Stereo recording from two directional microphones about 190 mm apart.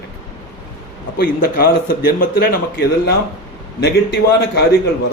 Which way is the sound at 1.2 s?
50° left (ahead or behind).